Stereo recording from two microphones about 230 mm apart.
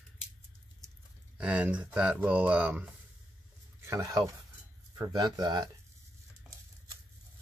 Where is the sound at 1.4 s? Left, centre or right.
Centre.